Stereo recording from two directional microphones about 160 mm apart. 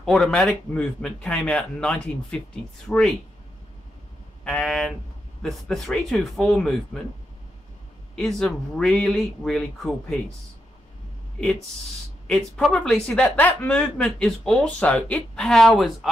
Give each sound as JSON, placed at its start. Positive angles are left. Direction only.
{"t": 0.0, "sound": "a woman's voice", "side_deg": 0}
{"t": 4.5, "sound": "a woman's voice", "side_deg": 5}
{"t": 8.2, "sound": "a woman's voice", "side_deg": 5}
{"t": 12.3, "sound": "a woman's voice", "side_deg": 5}